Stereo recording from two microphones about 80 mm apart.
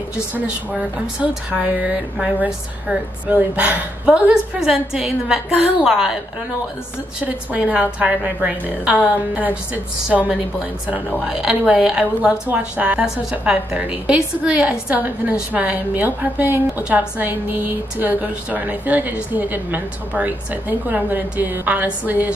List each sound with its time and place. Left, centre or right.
0.3 s a woman's voice: centre
7.2 s a woman's voice: centre
11.2 s a woman's voice: centre